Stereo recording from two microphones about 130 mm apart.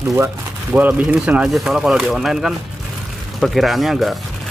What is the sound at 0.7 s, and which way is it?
Speech, 10° right (ahead or behind).